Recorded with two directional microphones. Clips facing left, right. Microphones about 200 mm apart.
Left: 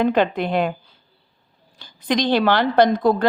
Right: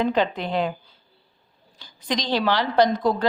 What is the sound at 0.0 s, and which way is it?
Speech, 55° left (ahead or behind).